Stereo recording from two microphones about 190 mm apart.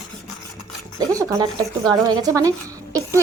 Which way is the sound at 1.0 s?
15° right (ahead or behind).